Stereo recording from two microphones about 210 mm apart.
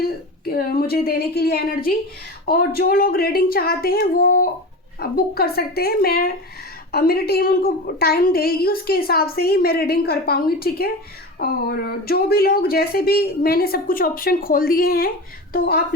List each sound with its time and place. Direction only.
0.4 s a woman's voice: 45° left (ahead or behind)